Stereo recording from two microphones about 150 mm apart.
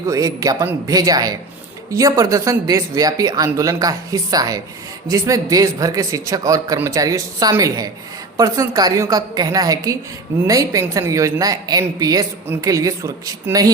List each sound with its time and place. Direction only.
0.1 s a woman's voice: 20° right (ahead or behind)